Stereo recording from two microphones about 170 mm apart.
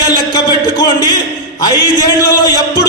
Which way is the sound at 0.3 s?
20° left (ahead or behind).